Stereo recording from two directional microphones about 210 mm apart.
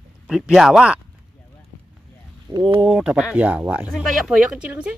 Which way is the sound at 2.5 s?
25° right (ahead or behind).